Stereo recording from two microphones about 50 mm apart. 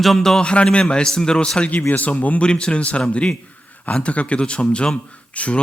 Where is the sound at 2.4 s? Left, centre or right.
Centre.